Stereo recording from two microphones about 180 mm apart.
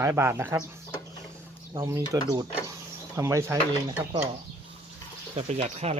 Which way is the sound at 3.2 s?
15° right (ahead or behind).